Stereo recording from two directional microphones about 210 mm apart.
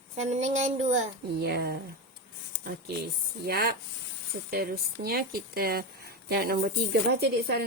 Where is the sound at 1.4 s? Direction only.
50° right (ahead or behind).